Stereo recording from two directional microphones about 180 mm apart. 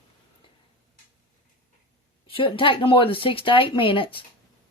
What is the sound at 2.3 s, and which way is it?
Speech, 30° left (ahead or behind).